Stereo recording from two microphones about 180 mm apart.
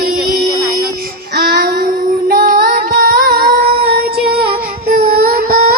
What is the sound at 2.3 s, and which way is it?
Music, 55° right (ahead or behind).